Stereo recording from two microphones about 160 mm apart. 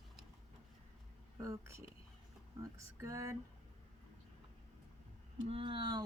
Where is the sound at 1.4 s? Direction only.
15° right (ahead or behind).